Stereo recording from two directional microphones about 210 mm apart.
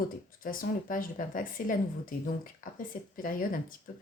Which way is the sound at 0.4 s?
40° left (ahead or behind).